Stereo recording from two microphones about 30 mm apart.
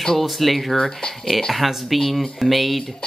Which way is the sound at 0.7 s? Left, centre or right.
Left.